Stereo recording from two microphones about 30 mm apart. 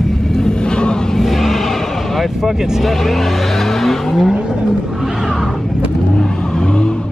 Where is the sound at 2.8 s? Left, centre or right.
Centre.